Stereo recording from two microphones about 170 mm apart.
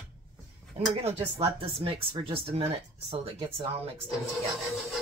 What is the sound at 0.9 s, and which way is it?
Speech, 35° right (ahead or behind).